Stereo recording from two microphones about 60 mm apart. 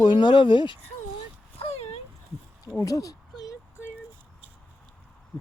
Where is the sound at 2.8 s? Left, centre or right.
Left.